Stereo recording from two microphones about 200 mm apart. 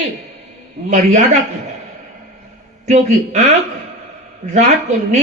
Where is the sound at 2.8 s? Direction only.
35° right (ahead or behind).